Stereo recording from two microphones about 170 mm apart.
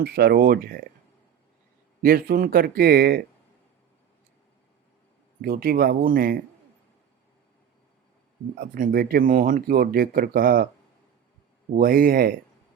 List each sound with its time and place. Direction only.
0.0 s speech: 65° right (ahead or behind)
2.0 s speech: 60° right (ahead or behind)
5.4 s speech: 60° right (ahead or behind)
8.5 s speech: 60° right (ahead or behind)
11.8 s speech: 60° right (ahead or behind)